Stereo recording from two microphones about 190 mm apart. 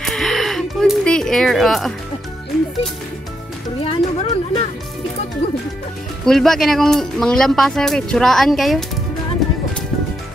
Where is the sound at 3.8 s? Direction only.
35° left (ahead or behind).